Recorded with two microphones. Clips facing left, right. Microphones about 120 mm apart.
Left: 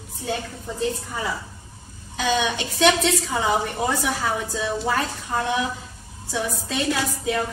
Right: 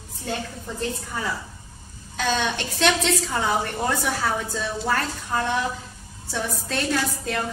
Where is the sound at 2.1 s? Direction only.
5° left (ahead or behind).